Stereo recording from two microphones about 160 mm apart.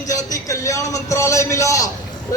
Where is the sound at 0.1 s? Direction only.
20° left (ahead or behind).